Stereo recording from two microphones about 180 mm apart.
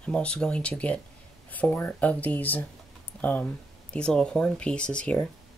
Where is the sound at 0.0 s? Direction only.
5° left (ahead or behind).